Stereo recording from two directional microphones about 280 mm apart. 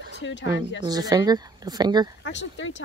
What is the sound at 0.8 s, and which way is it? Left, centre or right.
Speech, centre.